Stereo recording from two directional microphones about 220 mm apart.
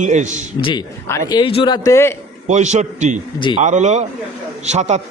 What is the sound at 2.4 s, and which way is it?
A man's voice, 30° right (ahead or behind).